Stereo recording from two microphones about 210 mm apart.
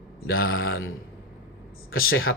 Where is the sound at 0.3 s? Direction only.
75° left (ahead or behind).